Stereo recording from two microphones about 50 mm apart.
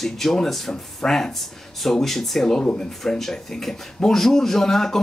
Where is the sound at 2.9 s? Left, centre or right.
Centre.